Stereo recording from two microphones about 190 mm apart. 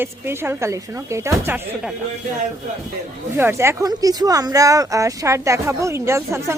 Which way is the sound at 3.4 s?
15° right (ahead or behind).